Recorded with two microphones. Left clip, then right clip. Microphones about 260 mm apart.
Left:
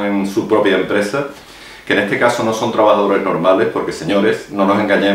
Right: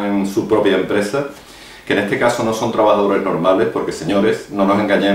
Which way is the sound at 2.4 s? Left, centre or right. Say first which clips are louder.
Left 1 dB; left.